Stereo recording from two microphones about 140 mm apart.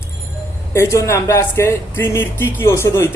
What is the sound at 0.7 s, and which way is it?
Speech, 20° left (ahead or behind).